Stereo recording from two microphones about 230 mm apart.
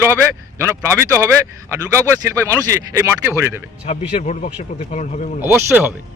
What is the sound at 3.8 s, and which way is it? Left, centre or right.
Speech, left.